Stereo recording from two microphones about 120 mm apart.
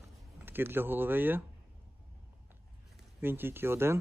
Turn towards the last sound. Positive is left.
turn(degrees=-20)  # may be behind; listen again after turning